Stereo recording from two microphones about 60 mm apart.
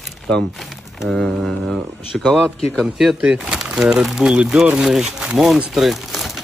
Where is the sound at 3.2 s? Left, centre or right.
Centre.